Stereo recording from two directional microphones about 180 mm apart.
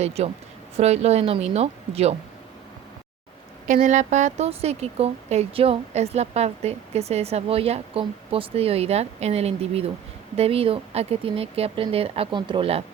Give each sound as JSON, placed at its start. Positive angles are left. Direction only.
{"t": 0.0, "sound": "speech", "side_deg": -35}
{"t": 3.7, "sound": "speech", "side_deg": -40}